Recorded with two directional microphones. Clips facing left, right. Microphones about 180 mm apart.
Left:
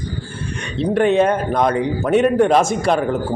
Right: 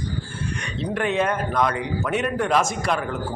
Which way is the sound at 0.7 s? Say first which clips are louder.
Left 9 dB; 30° left (ahead or behind).